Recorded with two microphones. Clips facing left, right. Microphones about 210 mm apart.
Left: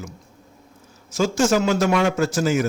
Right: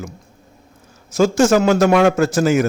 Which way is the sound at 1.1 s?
60° right (ahead or behind).